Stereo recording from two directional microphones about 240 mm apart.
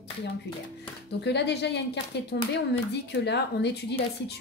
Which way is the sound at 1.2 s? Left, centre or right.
Left.